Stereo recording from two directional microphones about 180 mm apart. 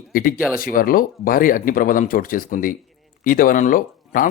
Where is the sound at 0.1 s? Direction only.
50° left (ahead or behind).